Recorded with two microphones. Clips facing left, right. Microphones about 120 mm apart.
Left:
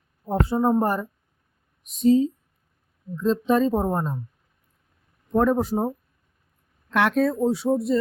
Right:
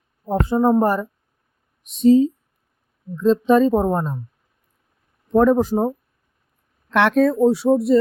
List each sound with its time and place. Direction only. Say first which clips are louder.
0.3 s speech: right 4 dB; 90° right
1.9 s speech: right 5 dB; 75° right (ahead or behind)
3.2 s speech: right 6 dB; 85° right
5.3 s speech: right 5 dB; 90° right
6.9 s speech: right 5 dB; 80° right